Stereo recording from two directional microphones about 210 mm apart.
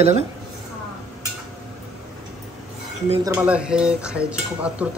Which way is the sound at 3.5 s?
5° right (ahead or behind).